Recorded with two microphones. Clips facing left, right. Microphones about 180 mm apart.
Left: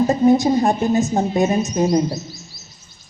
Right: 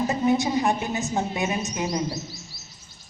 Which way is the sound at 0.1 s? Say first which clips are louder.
Left 8 dB; 35° left (ahead or behind).